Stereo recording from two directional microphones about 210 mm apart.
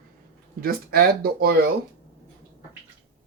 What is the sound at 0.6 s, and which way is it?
Speech, 45° right (ahead or behind).